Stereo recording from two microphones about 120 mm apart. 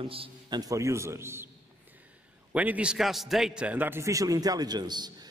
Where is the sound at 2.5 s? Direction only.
10° right (ahead or behind); by 5.1 s 35° right (ahead or behind).